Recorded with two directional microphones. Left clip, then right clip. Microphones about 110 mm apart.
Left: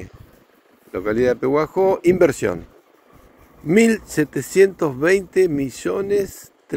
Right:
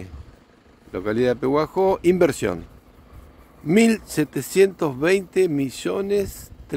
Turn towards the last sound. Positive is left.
turn(degrees=-5)  # may be behind; listen again after turning